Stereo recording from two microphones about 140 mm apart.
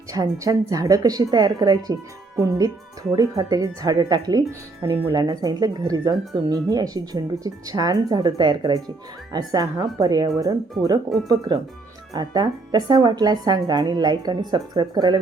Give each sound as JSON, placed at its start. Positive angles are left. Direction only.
{"t": 0.1, "sound": "speech", "side_deg": -25}